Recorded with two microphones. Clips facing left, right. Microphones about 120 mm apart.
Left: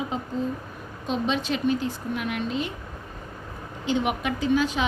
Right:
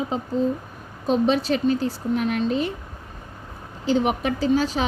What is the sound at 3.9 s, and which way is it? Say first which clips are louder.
Speech: right 4 dB; 35° right (ahead or behind).